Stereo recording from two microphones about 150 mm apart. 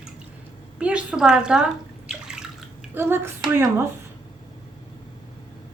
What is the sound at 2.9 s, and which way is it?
Speech, 15° right (ahead or behind).